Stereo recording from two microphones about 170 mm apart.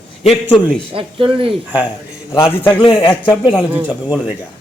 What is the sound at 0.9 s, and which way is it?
Speech, 30° right (ahead or behind).